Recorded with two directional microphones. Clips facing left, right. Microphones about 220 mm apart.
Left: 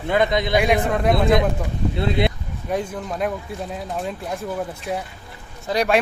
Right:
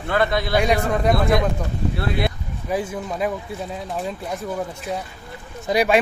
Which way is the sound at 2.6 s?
5° right (ahead or behind).